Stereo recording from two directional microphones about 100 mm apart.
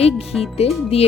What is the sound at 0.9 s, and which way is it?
Speech, 90° left.